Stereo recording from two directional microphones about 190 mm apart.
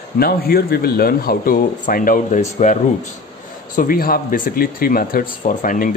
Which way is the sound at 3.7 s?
50° left (ahead or behind).